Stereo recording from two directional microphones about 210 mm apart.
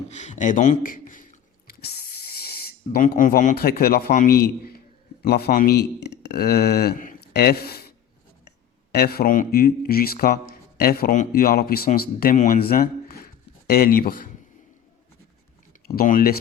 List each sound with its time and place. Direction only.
0.1 s a sound: 35° left (ahead or behind)
5.2 s speech: 45° left (ahead or behind)
15.9 s speech: 45° left (ahead or behind)